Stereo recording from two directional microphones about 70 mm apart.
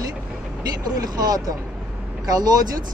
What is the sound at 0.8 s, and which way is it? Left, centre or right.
Speech, right.